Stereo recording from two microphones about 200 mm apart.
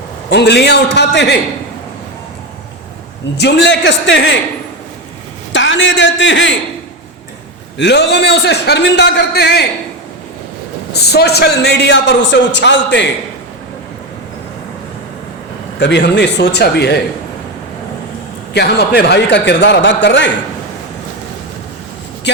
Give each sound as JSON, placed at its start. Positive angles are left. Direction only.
{"t": 0.3, "sound": "a man's voice", "side_deg": 60}
{"t": 3.3, "sound": "a man's voice", "side_deg": 60}
{"t": 5.5, "sound": "a man's voice", "side_deg": 65}
{"t": 7.8, "sound": "a man's voice", "side_deg": 60}
{"t": 10.9, "sound": "a man's voice", "side_deg": 55}
{"t": 15.8, "sound": "a man's voice", "side_deg": 60}
{"t": 18.5, "sound": "a man's voice", "side_deg": 55}